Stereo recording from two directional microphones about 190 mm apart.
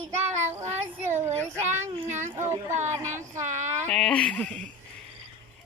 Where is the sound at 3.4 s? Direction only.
40° right (ahead or behind).